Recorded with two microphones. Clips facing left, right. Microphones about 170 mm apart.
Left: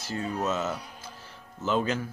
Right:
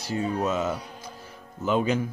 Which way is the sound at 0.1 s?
15° right (ahead or behind).